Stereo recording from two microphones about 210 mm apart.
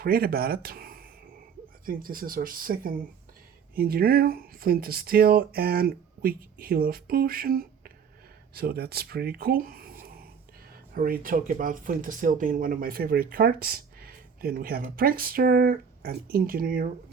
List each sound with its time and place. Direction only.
0.0 s speech: 45° right (ahead or behind)